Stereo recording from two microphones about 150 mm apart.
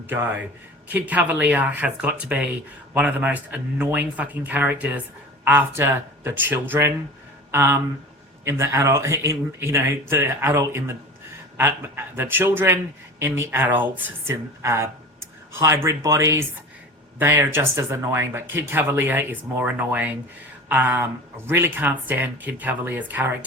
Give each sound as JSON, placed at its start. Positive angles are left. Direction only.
{"t": 0.1, "sound": "speech", "side_deg": -15}